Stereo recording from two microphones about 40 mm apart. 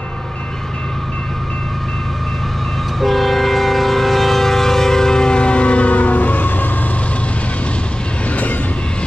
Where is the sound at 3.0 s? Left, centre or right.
Centre; by 6.6 s left.